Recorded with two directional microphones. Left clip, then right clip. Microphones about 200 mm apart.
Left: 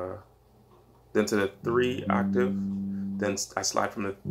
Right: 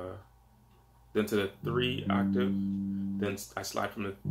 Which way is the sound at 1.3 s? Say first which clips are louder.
Left 5 dB; 5° left (ahead or behind).